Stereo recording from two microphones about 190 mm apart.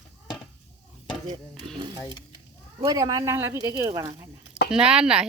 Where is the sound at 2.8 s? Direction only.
20° right (ahead or behind).